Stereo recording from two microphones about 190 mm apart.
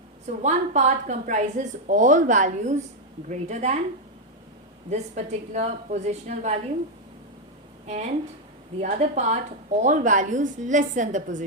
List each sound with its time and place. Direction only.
0.3 s a woman's voice: 40° right (ahead or behind)
4.9 s a woman's voice: 35° right (ahead or behind)
7.9 s a woman's voice: 35° right (ahead or behind)